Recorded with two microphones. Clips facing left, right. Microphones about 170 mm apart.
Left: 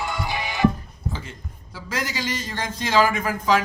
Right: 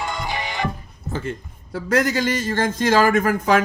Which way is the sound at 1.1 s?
55° right (ahead or behind).